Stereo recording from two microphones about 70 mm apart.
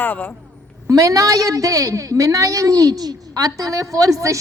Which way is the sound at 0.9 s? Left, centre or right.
Right.